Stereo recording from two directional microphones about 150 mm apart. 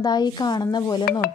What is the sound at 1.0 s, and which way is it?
Stir, 75° left (ahead or behind).